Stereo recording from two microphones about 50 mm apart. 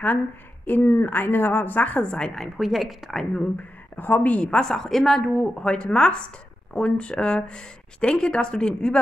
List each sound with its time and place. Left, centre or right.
0.7 s a woman's voice: left
2.0 s speech: centre
2.5 s a woman's voice: centre
3.9 s a woman's voice: left
4.5 s a woman's voice: centre